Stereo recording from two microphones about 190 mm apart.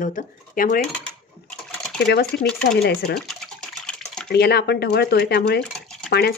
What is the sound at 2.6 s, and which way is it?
Speech, 55° left (ahead or behind).